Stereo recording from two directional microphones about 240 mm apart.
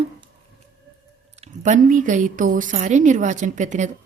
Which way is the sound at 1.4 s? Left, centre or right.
Right.